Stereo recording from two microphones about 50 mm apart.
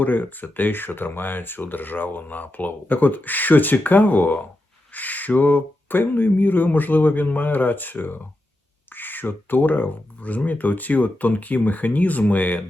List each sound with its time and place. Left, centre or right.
0.0 s speech: left